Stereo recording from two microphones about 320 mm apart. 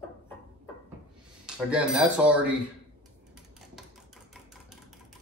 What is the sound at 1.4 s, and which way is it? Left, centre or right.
Speech, centre.